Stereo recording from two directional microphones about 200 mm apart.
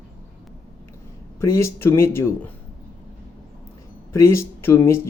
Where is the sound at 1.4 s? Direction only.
15° left (ahead or behind).